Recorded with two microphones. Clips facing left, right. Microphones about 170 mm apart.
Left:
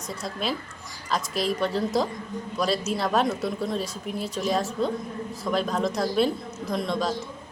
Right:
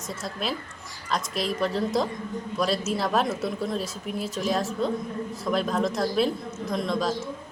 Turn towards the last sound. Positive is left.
turn(degrees=0)  # may be behind; listen again after turning